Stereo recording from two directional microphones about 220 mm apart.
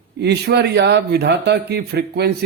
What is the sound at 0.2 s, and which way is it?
A man's voice, 50° right (ahead or behind).